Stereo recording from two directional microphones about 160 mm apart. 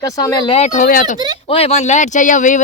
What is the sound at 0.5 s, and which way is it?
Speech, 45° left (ahead or behind).